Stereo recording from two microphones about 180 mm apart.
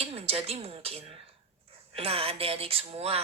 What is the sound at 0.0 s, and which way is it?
A woman's voice, 35° right (ahead or behind).